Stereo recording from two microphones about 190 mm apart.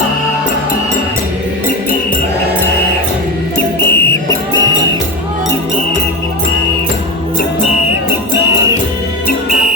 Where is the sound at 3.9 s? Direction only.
10° left (ahead or behind).